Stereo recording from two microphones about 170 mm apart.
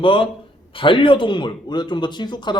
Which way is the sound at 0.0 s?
30° left (ahead or behind).